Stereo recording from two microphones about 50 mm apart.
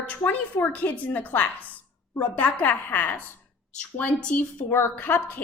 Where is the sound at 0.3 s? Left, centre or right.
Left.